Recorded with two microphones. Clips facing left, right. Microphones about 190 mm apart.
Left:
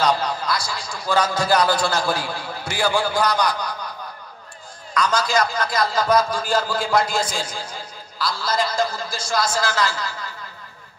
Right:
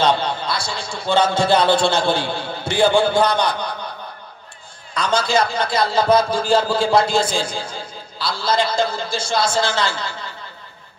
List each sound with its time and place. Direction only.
0.0 s speech: 25° right (ahead or behind)
4.9 s speech: 30° right (ahead or behind)